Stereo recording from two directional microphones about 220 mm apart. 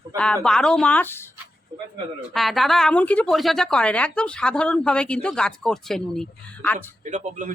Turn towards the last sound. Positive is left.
turn(degrees=-35)  # may be behind; listen again after turning